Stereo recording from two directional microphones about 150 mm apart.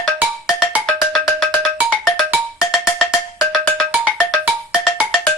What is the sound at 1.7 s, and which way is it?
Music, 10° right (ahead or behind).